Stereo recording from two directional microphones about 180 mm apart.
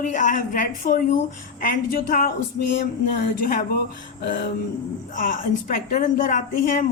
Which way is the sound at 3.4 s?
50° left (ahead or behind).